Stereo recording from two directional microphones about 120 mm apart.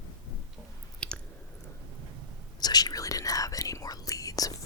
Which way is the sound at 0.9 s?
10° left (ahead or behind).